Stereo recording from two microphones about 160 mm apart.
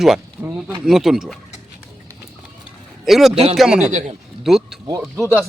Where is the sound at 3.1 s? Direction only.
Centre (ahead or behind).